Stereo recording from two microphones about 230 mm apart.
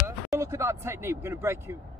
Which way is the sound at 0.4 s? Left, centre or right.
Centre.